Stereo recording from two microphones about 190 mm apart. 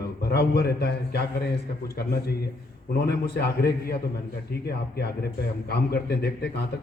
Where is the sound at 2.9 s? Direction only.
60° left (ahead or behind).